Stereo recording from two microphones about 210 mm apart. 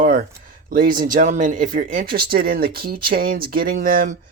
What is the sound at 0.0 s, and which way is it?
Speech, 45° right (ahead or behind).